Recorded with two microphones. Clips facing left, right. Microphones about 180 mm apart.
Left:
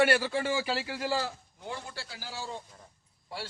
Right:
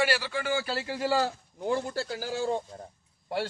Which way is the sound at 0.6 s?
10° left (ahead or behind).